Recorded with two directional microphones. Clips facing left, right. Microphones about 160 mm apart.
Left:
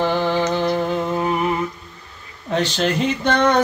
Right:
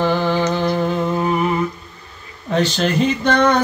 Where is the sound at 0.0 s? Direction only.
20° left (ahead or behind).